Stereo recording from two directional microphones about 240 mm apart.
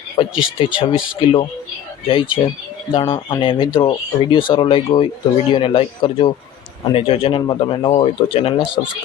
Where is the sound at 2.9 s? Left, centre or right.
Left.